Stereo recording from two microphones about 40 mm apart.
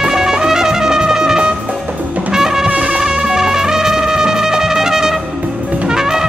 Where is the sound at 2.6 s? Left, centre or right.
Right.